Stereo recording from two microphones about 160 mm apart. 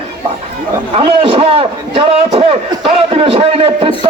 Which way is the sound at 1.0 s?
35° right (ahead or behind).